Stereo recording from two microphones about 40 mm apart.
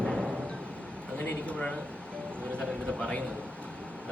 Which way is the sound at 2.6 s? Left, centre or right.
Left.